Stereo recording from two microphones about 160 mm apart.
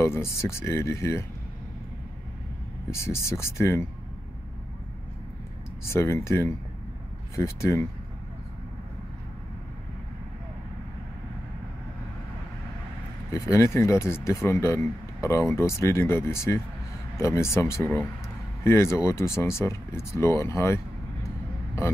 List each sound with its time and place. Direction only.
0.0 s speech: 15° left (ahead or behind)
2.9 s speech: 15° left (ahead or behind)
5.9 s speech: 15° left (ahead or behind)
13.3 s speech: 20° left (ahead or behind)